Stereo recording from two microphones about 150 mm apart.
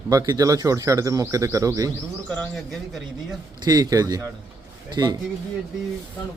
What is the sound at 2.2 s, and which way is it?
Speech, 10° left (ahead or behind).